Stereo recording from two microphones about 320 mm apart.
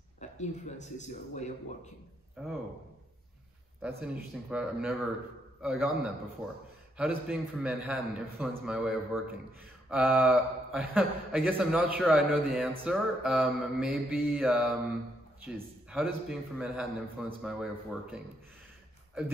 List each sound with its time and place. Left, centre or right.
0.2 s speech: left
2.4 s a man's voice: centre
3.8 s a man's voice: centre